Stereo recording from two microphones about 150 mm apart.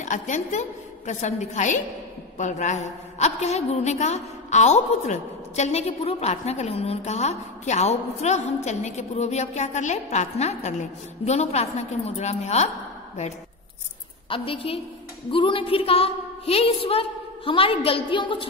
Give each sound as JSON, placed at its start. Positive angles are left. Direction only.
{"t": 0.0, "sound": "a woman's voice", "side_deg": 55}
{"t": 14.3, "sound": "a woman's voice", "side_deg": 35}